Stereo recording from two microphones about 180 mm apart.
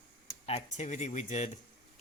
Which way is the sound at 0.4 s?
40° left (ahead or behind).